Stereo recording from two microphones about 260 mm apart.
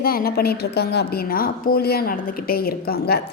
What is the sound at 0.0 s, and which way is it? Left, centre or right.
A woman's voice, left.